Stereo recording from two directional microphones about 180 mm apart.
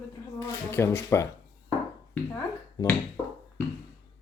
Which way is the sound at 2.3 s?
15° left (ahead or behind).